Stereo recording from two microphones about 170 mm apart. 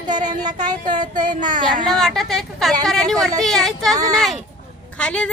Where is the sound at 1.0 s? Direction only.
50° right (ahead or behind).